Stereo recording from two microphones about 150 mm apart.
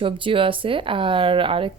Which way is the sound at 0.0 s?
35° right (ahead or behind).